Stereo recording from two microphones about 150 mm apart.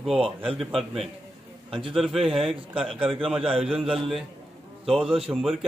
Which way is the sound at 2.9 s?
35° right (ahead or behind).